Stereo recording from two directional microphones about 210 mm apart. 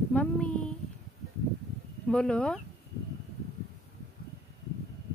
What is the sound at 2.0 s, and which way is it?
Speech, 5° left (ahead or behind).